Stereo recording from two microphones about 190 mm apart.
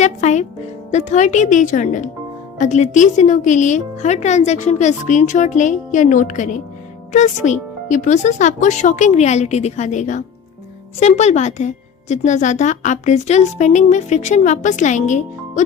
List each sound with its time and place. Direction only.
0.0 s speech: 40° left (ahead or behind)